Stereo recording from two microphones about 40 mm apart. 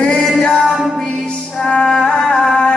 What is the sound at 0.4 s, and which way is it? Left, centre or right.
Music, centre.